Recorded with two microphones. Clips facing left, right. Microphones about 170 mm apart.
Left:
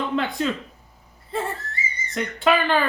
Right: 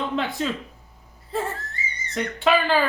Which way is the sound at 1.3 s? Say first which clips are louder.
Even; centre (ahead or behind).